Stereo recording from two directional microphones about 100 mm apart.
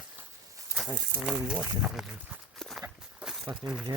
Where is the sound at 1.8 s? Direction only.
5° right (ahead or behind).